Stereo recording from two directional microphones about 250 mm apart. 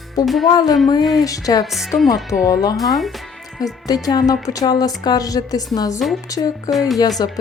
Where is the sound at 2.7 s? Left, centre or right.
Centre.